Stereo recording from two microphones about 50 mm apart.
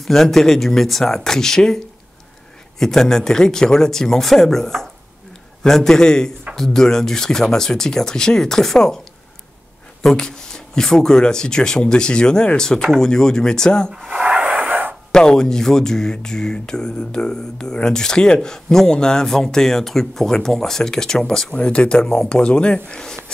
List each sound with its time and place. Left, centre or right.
0.0 s speech: centre
2.8 s speech: centre
10.0 s speech: centre
14.0 s a sound: centre
14.4 s a sound: right
15.1 s speech: centre
21.5 s speech: left